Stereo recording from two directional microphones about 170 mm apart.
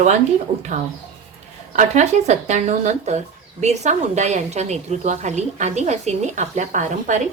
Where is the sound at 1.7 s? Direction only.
45° right (ahead or behind).